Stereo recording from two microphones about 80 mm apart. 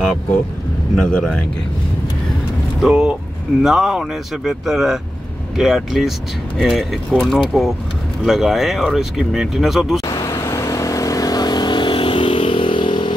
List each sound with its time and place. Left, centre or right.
0.9 s speech: centre
2.8 s speech: centre
10.2 s vehicle: left